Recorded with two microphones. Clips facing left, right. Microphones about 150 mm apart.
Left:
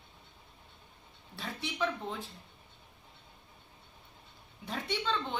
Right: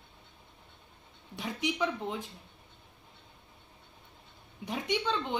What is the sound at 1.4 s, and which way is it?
Speech, 15° right (ahead or behind).